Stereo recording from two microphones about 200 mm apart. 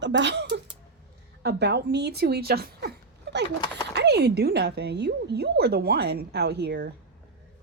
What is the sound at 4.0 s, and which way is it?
A woman's voice, 55° right (ahead or behind).